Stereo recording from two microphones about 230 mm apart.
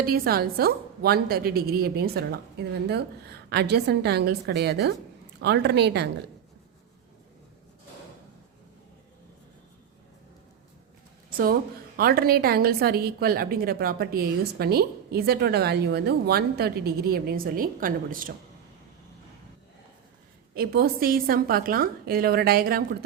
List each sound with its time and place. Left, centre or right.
0.0 s a woman's voice: right
11.9 s a woman's voice: right
20.5 s a woman's voice: right